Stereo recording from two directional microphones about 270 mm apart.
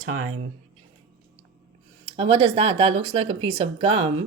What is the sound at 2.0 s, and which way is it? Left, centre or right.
Speech, right.